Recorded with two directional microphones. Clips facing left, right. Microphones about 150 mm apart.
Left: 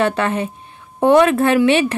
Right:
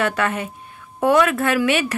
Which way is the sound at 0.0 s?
30° left (ahead or behind).